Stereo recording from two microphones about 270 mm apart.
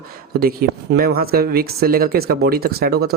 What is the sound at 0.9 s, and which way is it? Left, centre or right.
Speech, right.